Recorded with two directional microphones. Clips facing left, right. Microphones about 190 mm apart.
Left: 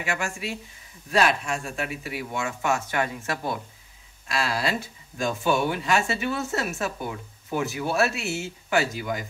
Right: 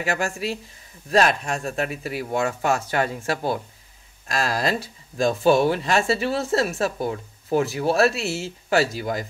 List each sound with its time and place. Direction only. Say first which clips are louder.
0.0 s speech: right 5 dB; 40° right (ahead or behind)
4.3 s speech: right 3 dB; 40° right (ahead or behind)